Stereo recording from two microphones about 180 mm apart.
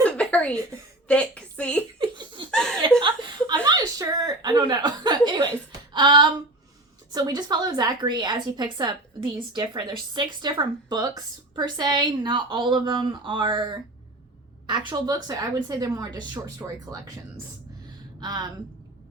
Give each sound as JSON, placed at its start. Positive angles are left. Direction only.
{"t": 0.0, "sound": "a sound", "side_deg": 5}
{"t": 1.0, "sound": "a woman's voice", "side_deg": 5}
{"t": 2.0, "sound": "laughter", "side_deg": -25}
{"t": 2.5, "sound": "chuckle", "side_deg": 5}
{"t": 3.0, "sound": "chuckle", "side_deg": -25}
{"t": 5.9, "sound": "a sound", "side_deg": -25}
{"t": 7.1, "sound": "a woman's voice", "side_deg": -20}
{"t": 18.2, "sound": "speech", "side_deg": -25}